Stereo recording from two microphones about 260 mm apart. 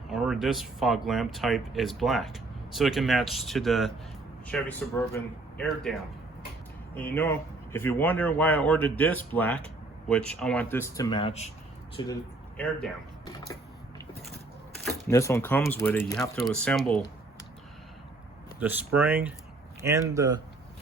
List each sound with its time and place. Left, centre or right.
0.1 s speech: centre
14.8 s speech: centre
18.6 s speech: centre